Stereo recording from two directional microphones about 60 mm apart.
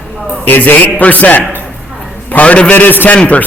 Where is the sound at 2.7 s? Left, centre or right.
Left.